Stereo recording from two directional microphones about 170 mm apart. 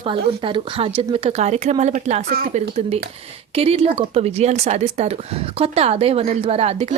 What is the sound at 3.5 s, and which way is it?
Speech, 35° right (ahead or behind).